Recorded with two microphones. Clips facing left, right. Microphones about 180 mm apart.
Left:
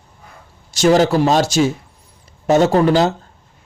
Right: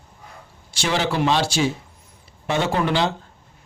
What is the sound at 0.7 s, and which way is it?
A man's voice, 45° left (ahead or behind).